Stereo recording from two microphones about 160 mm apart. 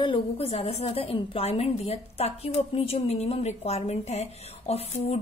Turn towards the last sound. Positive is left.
turn(degrees=40)  # may be behind; listen again after turning